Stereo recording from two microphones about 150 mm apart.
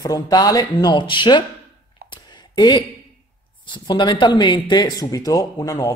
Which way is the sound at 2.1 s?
30° left (ahead or behind).